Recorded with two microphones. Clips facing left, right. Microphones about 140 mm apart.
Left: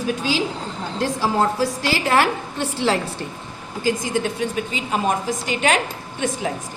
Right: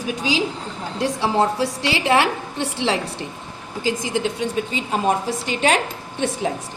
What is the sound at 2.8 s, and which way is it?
Speech, 50° left (ahead or behind).